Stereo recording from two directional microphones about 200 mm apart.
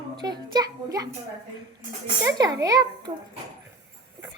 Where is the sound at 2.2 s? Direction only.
15° right (ahead or behind).